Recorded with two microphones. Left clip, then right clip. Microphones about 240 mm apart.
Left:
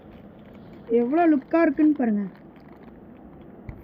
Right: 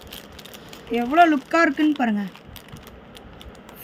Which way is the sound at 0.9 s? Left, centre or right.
Right.